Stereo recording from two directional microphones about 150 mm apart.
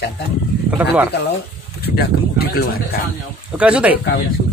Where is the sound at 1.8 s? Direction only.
90° left.